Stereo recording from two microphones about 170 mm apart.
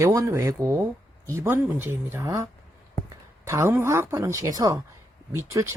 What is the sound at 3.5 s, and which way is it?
Speech, 15° right (ahead or behind).